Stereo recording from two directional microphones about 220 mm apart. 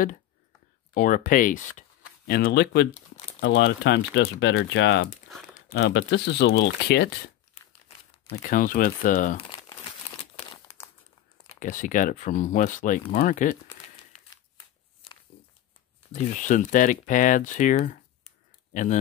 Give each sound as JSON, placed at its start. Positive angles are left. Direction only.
{"t": 0.9, "sound": "speech", "side_deg": 35}
{"t": 8.4, "sound": "speech", "side_deg": 40}
{"t": 9.5, "sound": "crumpling", "side_deg": 20}
{"t": 11.6, "sound": "speech", "side_deg": 35}
{"t": 16.1, "sound": "speech", "side_deg": 35}